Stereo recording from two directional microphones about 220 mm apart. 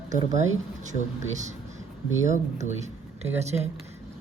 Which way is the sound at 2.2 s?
35° right (ahead or behind).